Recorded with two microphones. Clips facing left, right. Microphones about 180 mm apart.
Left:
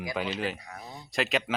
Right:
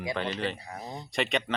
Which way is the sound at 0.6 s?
30° right (ahead or behind).